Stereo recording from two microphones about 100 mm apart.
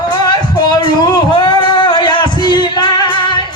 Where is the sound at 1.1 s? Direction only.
45° left (ahead or behind).